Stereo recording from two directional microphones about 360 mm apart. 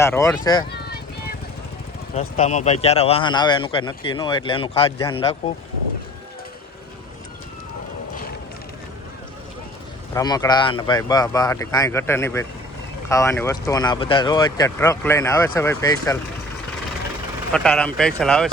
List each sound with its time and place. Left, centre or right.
0.0 s speech: centre
0.7 s vehicle: left
2.1 s speech: centre
10.2 s speech: centre
17.5 s speech: centre